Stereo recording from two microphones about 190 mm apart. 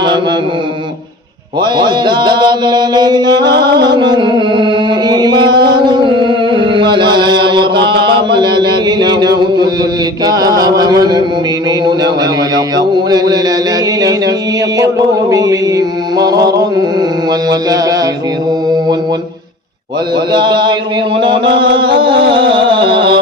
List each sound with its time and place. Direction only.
1.6 s music: 25° right (ahead or behind)
3.5 s music: 60° right (ahead or behind)
3.9 s music: 25° right (ahead or behind)
5.8 s mantra: 25° right (ahead or behind)
8.0 s chant: 25° right (ahead or behind)
10.2 s music: 20° right (ahead or behind)
12.5 s mantra: 20° right (ahead or behind)
17.5 s mantra: 20° right (ahead or behind)
20.3 s mantra: 25° right (ahead or behind)
21.8 s mantra: 25° right (ahead or behind)
22.3 s music: 25° right (ahead or behind)